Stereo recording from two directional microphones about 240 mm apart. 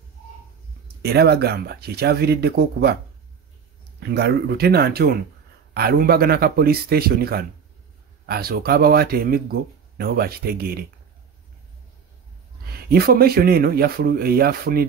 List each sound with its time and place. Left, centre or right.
1.0 s speech: right
4.0 s speech: right
12.6 s speech: right